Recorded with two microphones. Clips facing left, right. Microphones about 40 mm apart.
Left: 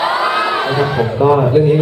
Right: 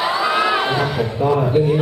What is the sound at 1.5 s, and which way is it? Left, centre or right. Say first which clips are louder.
Speech: left 5 dB; centre.